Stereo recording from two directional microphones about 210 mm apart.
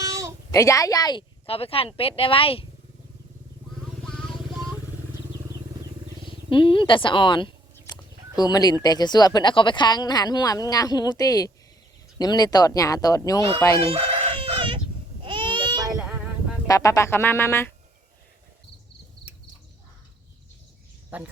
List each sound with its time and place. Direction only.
0.0 s a sound: 15° right (ahead or behind)
0.5 s speech: 15° left (ahead or behind)
4.0 s vehicle: centre (ahead or behind)
6.5 s speech: 25° left (ahead or behind)
14.1 s chicken: 25° right (ahead or behind)
15.2 s a sound: 25° right (ahead or behind)
16.0 s a sound: 5° right (ahead or behind)
16.6 s speech: 15° left (ahead or behind)
19.2 s cricket: 55° left (ahead or behind)
21.1 s speech: 5° right (ahead or behind)